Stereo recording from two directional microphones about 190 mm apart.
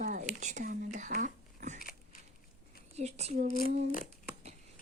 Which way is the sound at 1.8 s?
50° left (ahead or behind).